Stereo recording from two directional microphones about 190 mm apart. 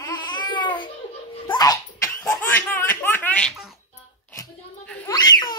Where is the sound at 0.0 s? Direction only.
25° left (ahead or behind).